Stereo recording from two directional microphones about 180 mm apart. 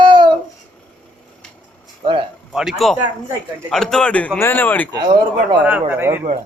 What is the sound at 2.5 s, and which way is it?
A man's voice, 5° right (ahead or behind).